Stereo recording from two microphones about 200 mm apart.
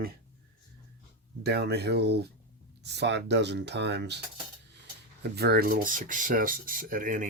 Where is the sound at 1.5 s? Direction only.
55° right (ahead or behind).